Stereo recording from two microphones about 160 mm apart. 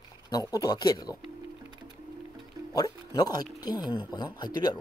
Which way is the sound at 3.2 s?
25° left (ahead or behind).